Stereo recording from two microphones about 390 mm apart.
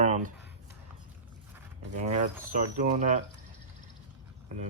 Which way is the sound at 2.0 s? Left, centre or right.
Centre.